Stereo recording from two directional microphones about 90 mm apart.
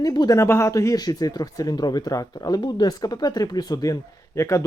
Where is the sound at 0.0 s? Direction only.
45° left (ahead or behind).